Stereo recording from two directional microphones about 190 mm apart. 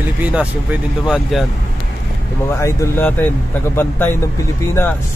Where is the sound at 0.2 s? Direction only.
5° right (ahead or behind).